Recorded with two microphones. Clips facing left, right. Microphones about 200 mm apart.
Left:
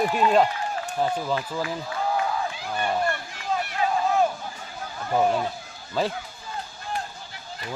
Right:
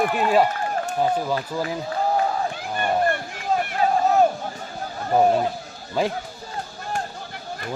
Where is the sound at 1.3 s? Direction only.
40° right (ahead or behind).